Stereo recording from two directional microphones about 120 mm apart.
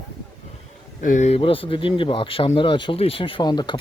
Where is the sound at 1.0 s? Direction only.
85° left.